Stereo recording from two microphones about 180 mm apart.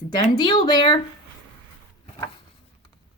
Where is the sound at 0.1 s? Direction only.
25° left (ahead or behind).